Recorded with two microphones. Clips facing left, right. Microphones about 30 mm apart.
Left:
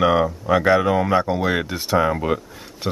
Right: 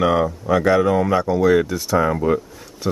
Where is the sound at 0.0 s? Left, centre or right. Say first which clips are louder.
Even; centre; by 2.0 s left.